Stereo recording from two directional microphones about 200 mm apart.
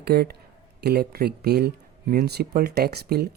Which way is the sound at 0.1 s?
50° right (ahead or behind).